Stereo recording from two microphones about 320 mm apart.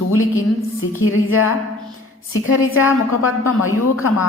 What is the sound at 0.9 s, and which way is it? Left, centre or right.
Speech, left.